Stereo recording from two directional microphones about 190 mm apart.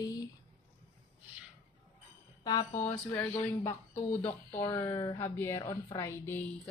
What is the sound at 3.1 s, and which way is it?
A woman's voice, 10° left (ahead or behind).